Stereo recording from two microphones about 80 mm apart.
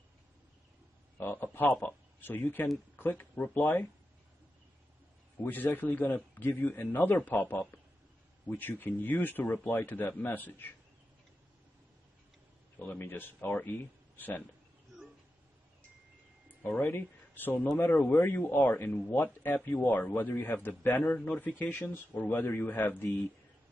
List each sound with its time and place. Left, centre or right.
1.1 s a man's voice: left
5.4 s speech: left
12.7 s speech: left
16.4 s speech: left